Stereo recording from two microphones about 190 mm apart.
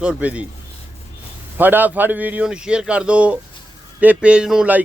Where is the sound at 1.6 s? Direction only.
10° right (ahead or behind).